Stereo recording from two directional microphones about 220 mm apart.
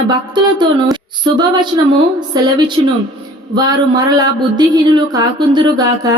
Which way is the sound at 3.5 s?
15° right (ahead or behind).